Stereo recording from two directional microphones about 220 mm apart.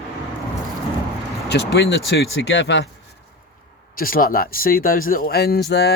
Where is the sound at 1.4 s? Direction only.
50° left (ahead or behind).